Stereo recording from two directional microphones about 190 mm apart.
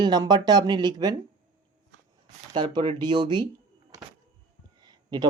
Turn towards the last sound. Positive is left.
turn(degrees=-20)  # may be behind; listen again after turning